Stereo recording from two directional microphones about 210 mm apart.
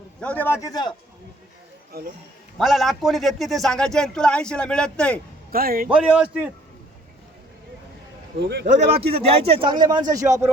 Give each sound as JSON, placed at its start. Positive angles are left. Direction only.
{"t": 0.2, "sound": "a man's voice", "side_deg": 5}
{"t": 1.9, "sound": "speech", "side_deg": -45}
{"t": 2.6, "sound": "a man's voice", "side_deg": 0}
{"t": 5.5, "sound": "a man's voice", "side_deg": -45}
{"t": 5.9, "sound": "a man's voice", "side_deg": -5}
{"t": 8.6, "sound": "speech", "side_deg": -30}